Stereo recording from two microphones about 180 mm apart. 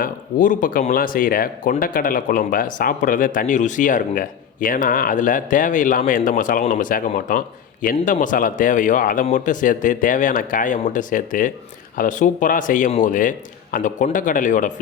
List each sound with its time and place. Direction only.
0.0 s speech: 45° left (ahead or behind)